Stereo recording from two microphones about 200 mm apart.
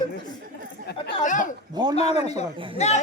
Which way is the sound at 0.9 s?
55° left (ahead or behind).